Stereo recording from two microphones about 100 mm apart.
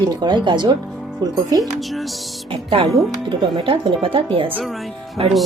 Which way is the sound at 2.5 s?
60° right (ahead or behind).